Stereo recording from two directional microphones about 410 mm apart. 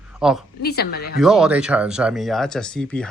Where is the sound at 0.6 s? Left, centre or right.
Left.